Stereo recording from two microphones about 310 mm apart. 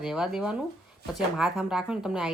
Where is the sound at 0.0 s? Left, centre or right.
Centre.